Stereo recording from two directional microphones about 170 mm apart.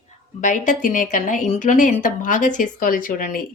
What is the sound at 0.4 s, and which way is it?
A woman's voice, 50° left (ahead or behind).